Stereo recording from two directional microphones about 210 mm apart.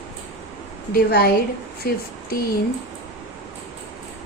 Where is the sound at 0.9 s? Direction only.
50° left (ahead or behind).